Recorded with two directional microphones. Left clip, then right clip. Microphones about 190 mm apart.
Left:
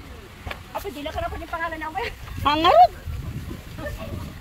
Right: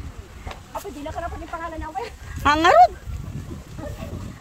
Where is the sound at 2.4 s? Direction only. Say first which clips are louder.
Right 1 dB; 20° right (ahead or behind).